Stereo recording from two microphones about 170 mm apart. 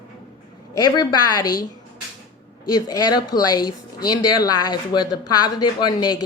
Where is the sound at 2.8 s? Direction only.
20° left (ahead or behind).